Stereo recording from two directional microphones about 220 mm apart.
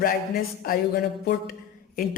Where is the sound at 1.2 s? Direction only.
40° left (ahead or behind).